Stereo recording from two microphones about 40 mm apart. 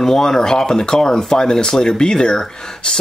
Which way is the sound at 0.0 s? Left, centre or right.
Centre.